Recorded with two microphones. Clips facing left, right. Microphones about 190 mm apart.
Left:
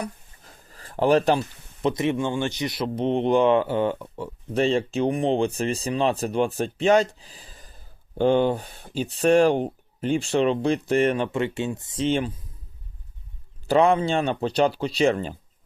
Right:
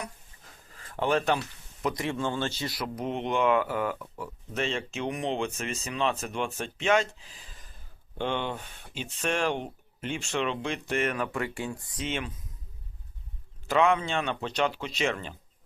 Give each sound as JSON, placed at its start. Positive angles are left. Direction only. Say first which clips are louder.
{"t": 0.0, "sound": "a sound", "louder": "left 7 dB", "side_deg": 35}
{"t": 1.8, "sound": "speech", "louder": "left 6 dB", "side_deg": 25}
{"t": 13.7, "sound": "speech", "louder": "left 5 dB", "side_deg": 35}